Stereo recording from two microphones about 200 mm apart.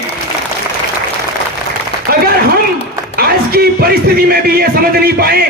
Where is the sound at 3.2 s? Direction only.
50° right (ahead or behind).